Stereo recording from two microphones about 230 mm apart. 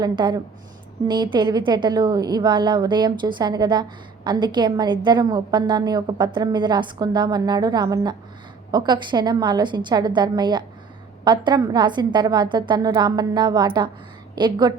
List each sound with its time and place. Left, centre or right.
0.0 s a woman's voice: centre